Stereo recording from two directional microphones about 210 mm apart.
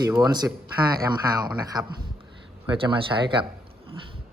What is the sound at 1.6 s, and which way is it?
Speech, 15° right (ahead or behind).